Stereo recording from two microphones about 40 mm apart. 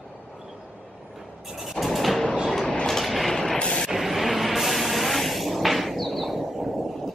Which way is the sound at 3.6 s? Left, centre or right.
Left.